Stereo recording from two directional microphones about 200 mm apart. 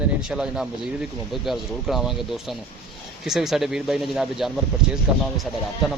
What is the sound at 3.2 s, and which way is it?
Speech, centre (ahead or behind).